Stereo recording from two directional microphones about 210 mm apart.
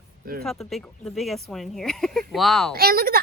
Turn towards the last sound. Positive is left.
turn(degrees=-45)  # may be behind; listen again after turning